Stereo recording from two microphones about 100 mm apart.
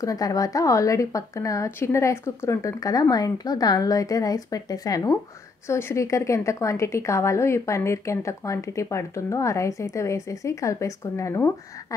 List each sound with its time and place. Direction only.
0.0 s a woman's voice: 35° left (ahead or behind)
5.7 s a woman's voice: 25° left (ahead or behind)